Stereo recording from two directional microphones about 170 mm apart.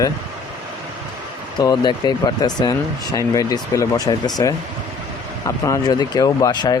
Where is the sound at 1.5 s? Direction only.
25° left (ahead or behind).